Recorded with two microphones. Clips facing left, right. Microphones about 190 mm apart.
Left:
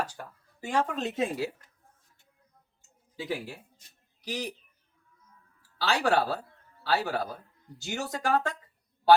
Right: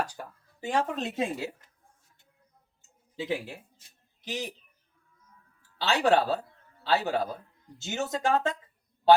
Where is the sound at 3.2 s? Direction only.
20° right (ahead or behind).